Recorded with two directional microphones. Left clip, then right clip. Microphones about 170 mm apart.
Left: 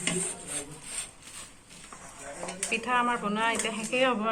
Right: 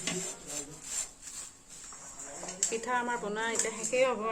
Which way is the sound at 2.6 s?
50° right (ahead or behind).